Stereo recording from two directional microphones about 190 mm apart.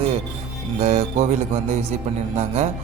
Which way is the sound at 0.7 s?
35° right (ahead or behind).